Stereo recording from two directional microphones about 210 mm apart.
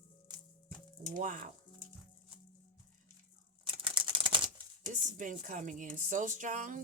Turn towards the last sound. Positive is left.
turn(degrees=-40)  # may be behind; listen again after turning